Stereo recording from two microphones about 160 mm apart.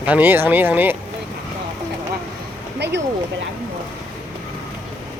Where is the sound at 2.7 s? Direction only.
90° right.